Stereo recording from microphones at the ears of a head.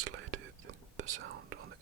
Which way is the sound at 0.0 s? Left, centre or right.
Right.